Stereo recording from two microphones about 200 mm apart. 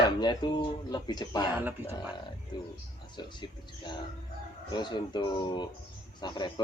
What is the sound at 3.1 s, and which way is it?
A man's voice, 25° left (ahead or behind).